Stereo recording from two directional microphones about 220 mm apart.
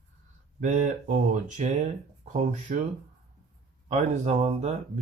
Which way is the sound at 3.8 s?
30° right (ahead or behind).